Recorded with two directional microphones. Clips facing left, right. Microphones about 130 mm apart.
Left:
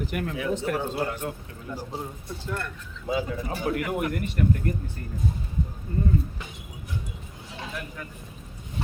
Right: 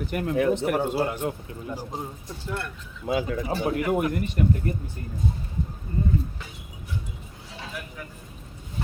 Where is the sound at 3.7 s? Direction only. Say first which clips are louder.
Right 3 dB; 20° right (ahead or behind).